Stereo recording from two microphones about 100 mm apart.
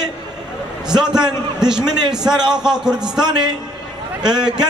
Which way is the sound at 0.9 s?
5° right (ahead or behind).